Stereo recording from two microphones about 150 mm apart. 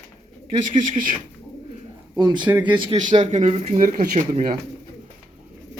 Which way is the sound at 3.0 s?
55° right (ahead or behind).